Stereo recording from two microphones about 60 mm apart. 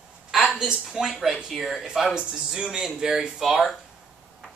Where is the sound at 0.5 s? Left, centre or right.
Centre.